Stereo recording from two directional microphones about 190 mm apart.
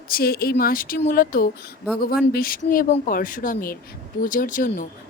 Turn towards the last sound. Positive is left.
turn(degrees=45)  # may be behind; listen again after turning